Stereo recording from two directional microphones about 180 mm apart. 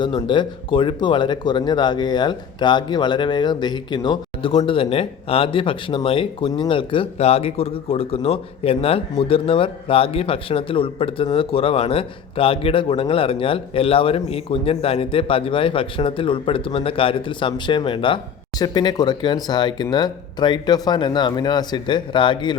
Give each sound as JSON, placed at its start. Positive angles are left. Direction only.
{"t": 0.2, "sound": "speech", "side_deg": 25}